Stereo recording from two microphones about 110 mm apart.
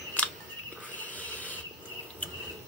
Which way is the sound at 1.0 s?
15° left (ahead or behind).